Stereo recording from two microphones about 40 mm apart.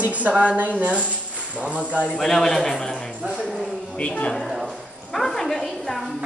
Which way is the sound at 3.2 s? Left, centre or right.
Centre.